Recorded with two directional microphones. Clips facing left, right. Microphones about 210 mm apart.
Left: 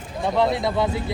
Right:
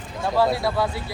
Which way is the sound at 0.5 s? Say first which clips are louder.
Left 1 dB; 20° left (ahead or behind).